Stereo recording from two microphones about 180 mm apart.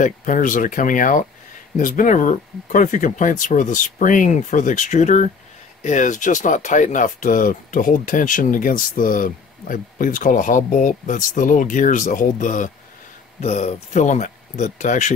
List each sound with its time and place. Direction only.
0.0 s speech: 45° left (ahead or behind)